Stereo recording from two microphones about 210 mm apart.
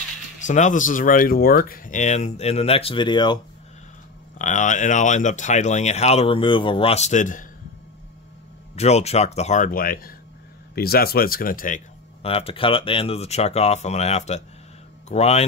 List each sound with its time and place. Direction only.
0.5 s speech: 35° left (ahead or behind)
4.4 s speech: 35° left (ahead or behind)
8.7 s speech: 30° left (ahead or behind)